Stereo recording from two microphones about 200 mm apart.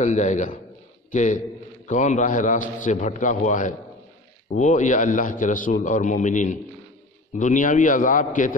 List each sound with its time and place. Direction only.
0.0 s a man's voice: 35° left (ahead or behind)